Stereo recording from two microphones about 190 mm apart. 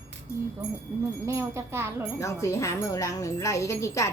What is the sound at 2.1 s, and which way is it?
Speech, 15° left (ahead or behind).